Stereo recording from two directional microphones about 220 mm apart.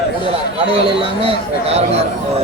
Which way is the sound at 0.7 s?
25° right (ahead or behind).